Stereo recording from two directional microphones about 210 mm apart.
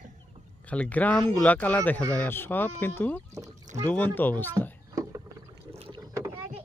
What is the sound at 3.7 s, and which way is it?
Speech, 15° right (ahead or behind).